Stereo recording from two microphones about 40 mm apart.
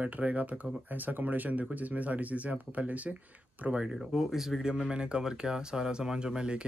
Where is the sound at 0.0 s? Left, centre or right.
Right.